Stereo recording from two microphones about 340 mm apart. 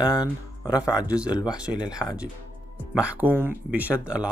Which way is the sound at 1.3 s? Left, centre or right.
Centre.